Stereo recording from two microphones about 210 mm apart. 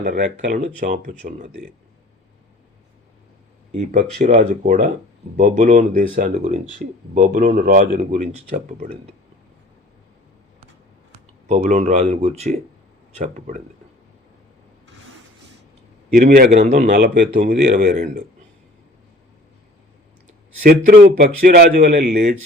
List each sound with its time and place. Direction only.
0.0 s speech: 45° right (ahead or behind)
3.7 s speech: 30° right (ahead or behind)
11.1 s speech: 35° right (ahead or behind)
16.1 s a man's voice: 45° right (ahead or behind)
16.5 s a man's voice: 35° right (ahead or behind)
20.7 s a man's voice: 45° right (ahead or behind)